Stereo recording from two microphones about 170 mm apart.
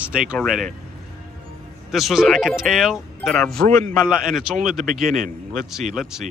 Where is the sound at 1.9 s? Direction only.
Centre (ahead or behind).